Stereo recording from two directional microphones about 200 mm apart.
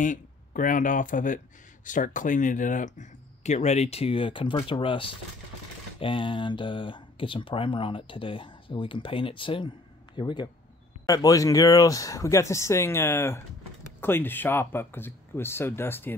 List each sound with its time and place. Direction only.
0.0 s speech: 40° left (ahead or behind); by 16.2 s 10° left (ahead or behind)